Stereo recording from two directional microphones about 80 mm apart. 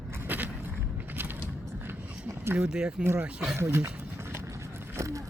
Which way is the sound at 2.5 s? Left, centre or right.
Centre.